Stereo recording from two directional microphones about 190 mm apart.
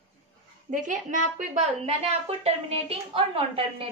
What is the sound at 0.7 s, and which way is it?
A woman's voice, 40° right (ahead or behind).